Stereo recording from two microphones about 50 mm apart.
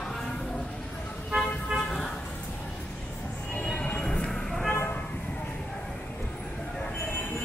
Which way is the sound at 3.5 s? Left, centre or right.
Left.